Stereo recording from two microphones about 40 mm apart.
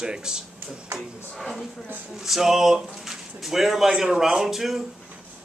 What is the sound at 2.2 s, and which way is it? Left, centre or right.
Speech, centre.